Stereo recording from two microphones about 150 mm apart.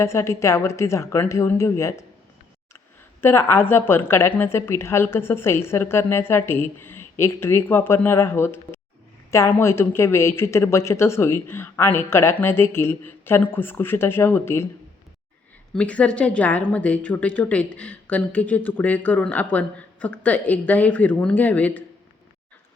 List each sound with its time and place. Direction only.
0.0 s a woman's voice: 15° left (ahead or behind)
3.2 s a woman's voice: 15° left (ahead or behind)
15.7 s a woman's voice: 10° left (ahead or behind)